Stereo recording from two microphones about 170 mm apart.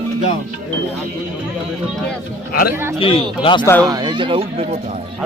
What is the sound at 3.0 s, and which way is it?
Speech, 30° left (ahead or behind).